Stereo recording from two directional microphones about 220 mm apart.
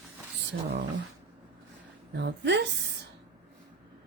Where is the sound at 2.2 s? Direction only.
50° right (ahead or behind).